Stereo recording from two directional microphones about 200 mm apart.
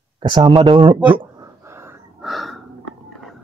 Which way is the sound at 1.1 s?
25° right (ahead or behind).